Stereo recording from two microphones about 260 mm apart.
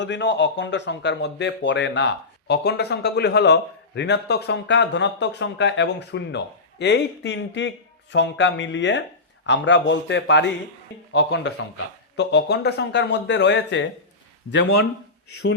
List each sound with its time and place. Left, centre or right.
0.0 s a man's voice: left